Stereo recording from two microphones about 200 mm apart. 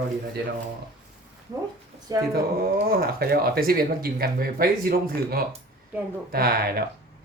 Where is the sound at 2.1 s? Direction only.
20° right (ahead or behind).